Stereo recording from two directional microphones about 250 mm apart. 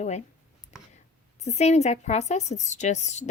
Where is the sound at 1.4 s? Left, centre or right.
Left.